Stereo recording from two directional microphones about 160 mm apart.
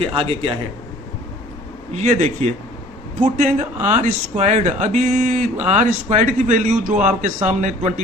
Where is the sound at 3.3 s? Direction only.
45° right (ahead or behind).